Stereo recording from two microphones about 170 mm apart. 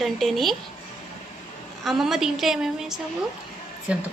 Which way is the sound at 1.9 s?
Centre (ahead or behind).